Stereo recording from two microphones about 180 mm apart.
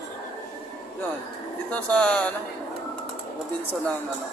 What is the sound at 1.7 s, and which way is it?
Speech, 5° left (ahead or behind).